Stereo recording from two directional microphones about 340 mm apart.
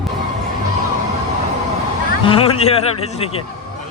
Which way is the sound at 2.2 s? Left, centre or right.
Centre.